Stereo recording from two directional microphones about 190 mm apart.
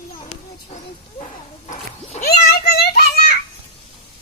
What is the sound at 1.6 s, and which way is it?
Dog, 40° left (ahead or behind).